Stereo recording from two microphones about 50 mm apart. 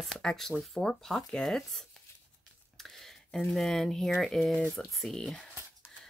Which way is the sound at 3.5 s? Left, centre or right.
Centre.